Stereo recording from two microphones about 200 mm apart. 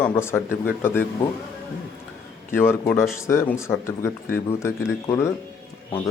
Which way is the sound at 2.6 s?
10° left (ahead or behind).